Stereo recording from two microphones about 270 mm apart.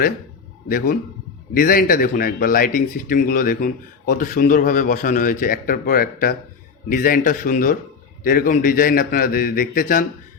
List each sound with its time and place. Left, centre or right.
1.5 s a man's voice: left